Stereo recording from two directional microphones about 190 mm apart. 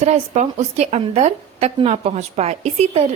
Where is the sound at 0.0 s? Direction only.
35° right (ahead or behind).